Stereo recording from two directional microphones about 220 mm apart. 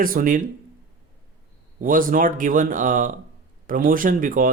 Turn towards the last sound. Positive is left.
turn(degrees=-40)  # may be behind; listen again after turning